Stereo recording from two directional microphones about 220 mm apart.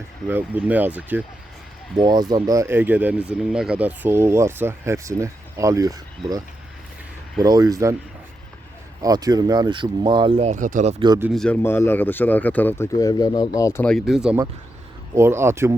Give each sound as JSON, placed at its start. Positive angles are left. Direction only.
{"t": 0.3, "sound": "speech", "side_deg": -10}
{"t": 2.0, "sound": "speech", "side_deg": -20}
{"t": 9.0, "sound": "speech", "side_deg": -15}
{"t": 11.0, "sound": "speech", "side_deg": -20}
{"t": 11.3, "sound": "speech", "side_deg": 5}
{"t": 13.8, "sound": "speech", "side_deg": 0}